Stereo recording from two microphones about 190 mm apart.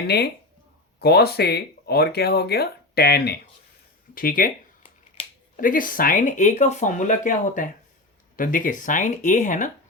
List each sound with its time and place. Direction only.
0.9 s speech: 55° left (ahead or behind)
5.5 s speech: 45° left (ahead or behind)